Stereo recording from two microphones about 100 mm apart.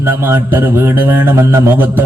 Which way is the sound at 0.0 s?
25° right (ahead or behind).